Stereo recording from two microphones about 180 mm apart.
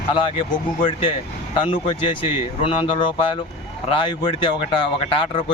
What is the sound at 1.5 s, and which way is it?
Speech, 30° left (ahead or behind).